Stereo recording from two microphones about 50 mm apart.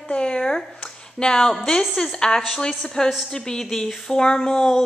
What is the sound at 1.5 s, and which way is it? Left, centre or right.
A woman's voice, centre.